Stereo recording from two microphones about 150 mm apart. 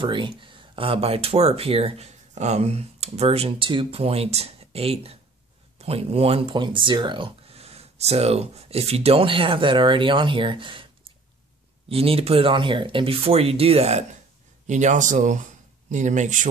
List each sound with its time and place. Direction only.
0.0 s speech: 35° right (ahead or behind)
11.9 s speech: 40° right (ahead or behind); by 16.4 s 55° right (ahead or behind)